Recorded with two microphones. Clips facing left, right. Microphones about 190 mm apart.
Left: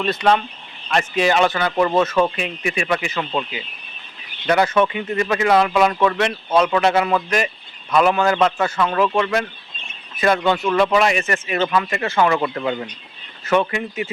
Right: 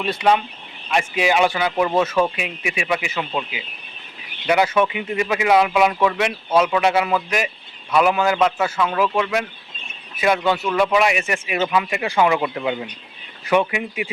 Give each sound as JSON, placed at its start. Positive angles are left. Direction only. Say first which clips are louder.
{"t": 0.0, "sound": "speech", "louder": "left 1 dB", "side_deg": -10}